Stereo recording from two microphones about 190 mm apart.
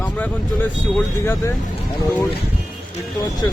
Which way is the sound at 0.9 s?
15° left (ahead or behind).